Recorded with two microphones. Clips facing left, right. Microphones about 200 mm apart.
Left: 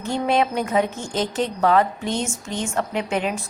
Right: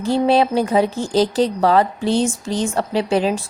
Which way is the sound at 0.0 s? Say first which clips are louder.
Right 5 dB; 35° right (ahead or behind).